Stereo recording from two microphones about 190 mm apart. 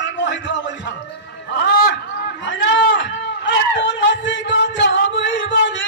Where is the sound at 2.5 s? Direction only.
75° left (ahead or behind).